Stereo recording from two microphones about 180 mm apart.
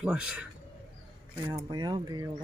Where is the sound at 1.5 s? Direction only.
20° right (ahead or behind).